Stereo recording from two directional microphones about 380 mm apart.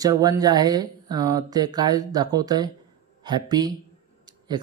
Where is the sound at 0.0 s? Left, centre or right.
Centre.